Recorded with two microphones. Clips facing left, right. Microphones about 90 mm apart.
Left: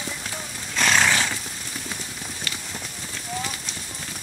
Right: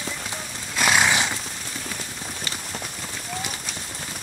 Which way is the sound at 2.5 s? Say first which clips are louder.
Left 1 dB; 20° right (ahead or behind).